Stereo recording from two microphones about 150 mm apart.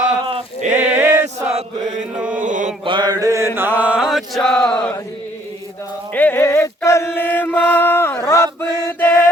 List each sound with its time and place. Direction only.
0.3 s a sound: 45° right (ahead or behind)
0.9 s chant: 15° right (ahead or behind)
2.1 s chant: 10° right (ahead or behind)
2.4 s chant: 55° right (ahead or behind)
2.8 s chant: 30° right (ahead or behind); by 4.9 s 5° left (ahead or behind)
6.1 s chant: 10° left (ahead or behind)
8.9 s music: 15° left (ahead or behind)